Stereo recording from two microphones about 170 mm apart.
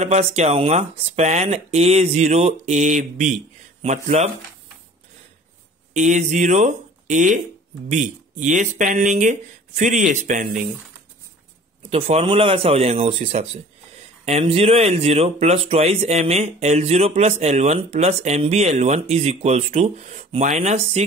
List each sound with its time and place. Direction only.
0.0 s speech: 40° right (ahead or behind)
5.9 s speech: 45° right (ahead or behind)
11.8 s speech: 35° right (ahead or behind)